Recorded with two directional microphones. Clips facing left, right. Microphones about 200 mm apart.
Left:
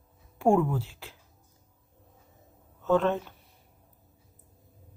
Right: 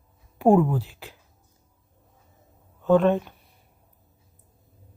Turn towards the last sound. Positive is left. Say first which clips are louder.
# right 6 dB
turn(degrees=-15)  # may be behind; listen again after turning